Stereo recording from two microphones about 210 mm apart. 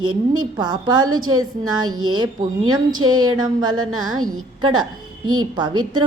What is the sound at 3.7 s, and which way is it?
Speech, 90° right.